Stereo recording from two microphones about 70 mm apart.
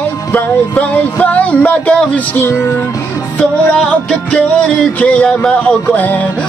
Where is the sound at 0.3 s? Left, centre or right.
Left.